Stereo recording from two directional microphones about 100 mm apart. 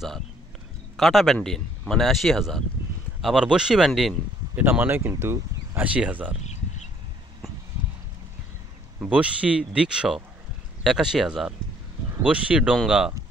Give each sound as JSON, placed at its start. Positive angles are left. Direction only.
{"t": 0.9, "sound": "a man's voice", "side_deg": 0}
{"t": 4.6, "sound": "speech", "side_deg": -20}
{"t": 5.9, "sound": "speech", "side_deg": -15}
{"t": 9.0, "sound": "a man's voice", "side_deg": -10}